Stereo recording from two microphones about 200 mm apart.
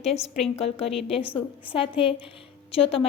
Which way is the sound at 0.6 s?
30° left (ahead or behind).